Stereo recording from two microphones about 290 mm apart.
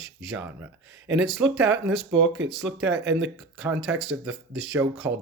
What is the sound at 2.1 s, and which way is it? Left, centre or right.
Speech, right.